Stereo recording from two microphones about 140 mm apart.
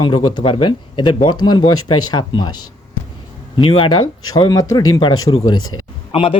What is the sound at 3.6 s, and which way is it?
Speech, 40° left (ahead or behind).